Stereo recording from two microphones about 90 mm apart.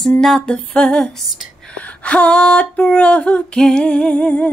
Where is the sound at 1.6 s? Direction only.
15° left (ahead or behind).